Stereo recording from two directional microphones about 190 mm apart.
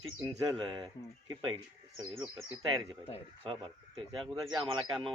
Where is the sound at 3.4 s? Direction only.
25° right (ahead or behind).